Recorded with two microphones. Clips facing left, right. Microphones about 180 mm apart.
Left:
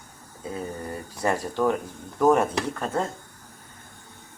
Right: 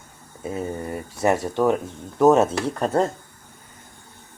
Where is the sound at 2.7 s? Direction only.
35° right (ahead or behind).